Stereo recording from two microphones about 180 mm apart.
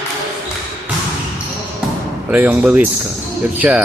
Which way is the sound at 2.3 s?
10° right (ahead or behind).